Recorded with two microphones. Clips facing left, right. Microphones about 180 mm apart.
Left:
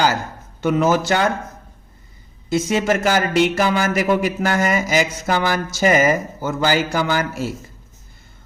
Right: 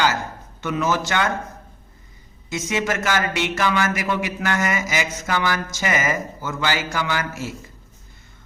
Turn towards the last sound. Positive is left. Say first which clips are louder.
# left 5 dB
turn(degrees=35)  # may be behind; listen again after turning